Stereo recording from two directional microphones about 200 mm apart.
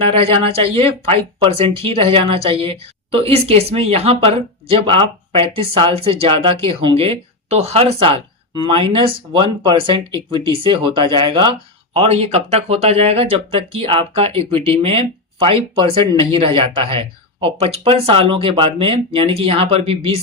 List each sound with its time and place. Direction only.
0.0 s speech: 30° right (ahead or behind)